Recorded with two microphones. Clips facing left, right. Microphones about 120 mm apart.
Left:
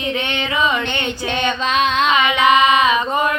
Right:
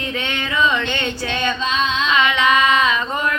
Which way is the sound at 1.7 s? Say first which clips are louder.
Left 7 dB; 55° left (ahead or behind).